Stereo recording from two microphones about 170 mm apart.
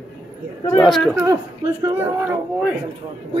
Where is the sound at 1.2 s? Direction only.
20° right (ahead or behind).